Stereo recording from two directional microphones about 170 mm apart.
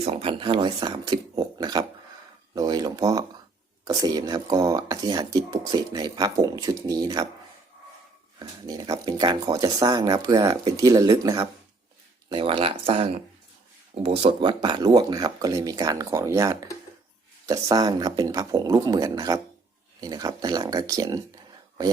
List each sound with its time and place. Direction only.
0.0 s speech: 35° right (ahead or behind)
8.4 s speech: 20° right (ahead or behind)